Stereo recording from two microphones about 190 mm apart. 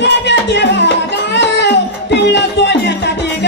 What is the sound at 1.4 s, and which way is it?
Music, 65° left (ahead or behind).